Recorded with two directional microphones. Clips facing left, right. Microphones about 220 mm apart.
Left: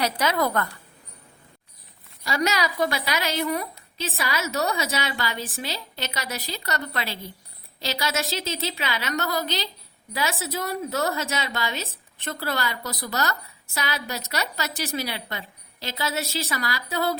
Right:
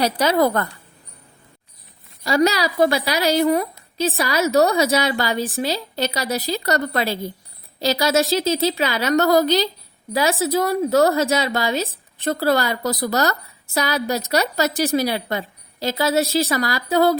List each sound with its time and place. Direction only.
0.0 s a woman's voice: 35° right (ahead or behind)
2.2 s a woman's voice: 35° right (ahead or behind)